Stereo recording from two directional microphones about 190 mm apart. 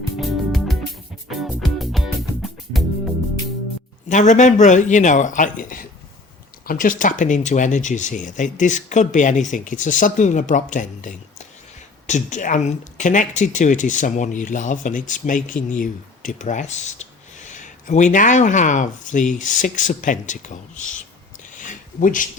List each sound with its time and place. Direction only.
0.2 s music: centre (ahead or behind)
4.1 s speech: 40° left (ahead or behind)
21.6 s a sound: 45° left (ahead or behind)